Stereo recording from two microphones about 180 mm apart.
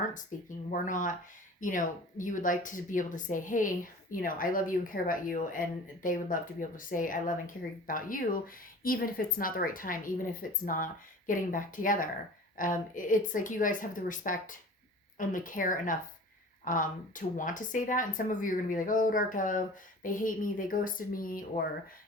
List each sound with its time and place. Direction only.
0.7 s a woman's voice: 45° left (ahead or behind)